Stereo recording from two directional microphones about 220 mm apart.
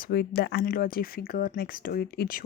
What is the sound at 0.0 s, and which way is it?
Speech, 45° left (ahead or behind).